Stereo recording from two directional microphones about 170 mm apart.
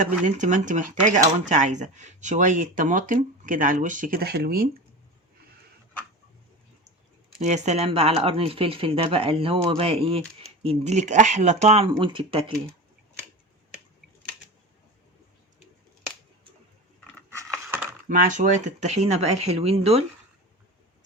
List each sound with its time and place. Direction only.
0.0 s speech: 45° right (ahead or behind); by 4.7 s 60° right (ahead or behind)
7.3 s speech: 45° right (ahead or behind)
18.1 s speech: 50° right (ahead or behind)